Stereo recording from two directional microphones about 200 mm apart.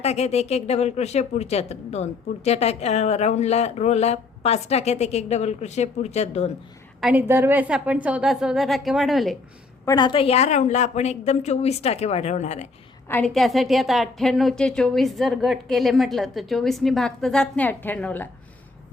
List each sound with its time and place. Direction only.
0.0 s speech: 30° left (ahead or behind)
7.0 s a woman's voice: 10° right (ahead or behind)
9.8 s speech: 20° left (ahead or behind)
13.1 s a woman's voice: 5° left (ahead or behind)